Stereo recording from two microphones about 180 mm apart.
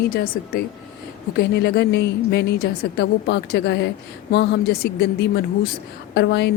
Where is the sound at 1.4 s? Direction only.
65° left (ahead or behind).